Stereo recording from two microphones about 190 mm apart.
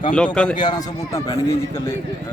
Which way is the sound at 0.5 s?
20° left (ahead or behind).